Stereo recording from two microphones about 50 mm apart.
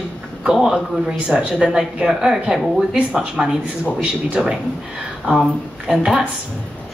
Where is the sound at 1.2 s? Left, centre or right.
Right.